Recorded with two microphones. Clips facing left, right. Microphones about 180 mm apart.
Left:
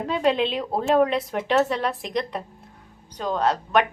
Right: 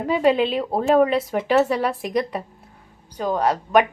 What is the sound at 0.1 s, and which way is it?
A woman's voice, 10° right (ahead or behind).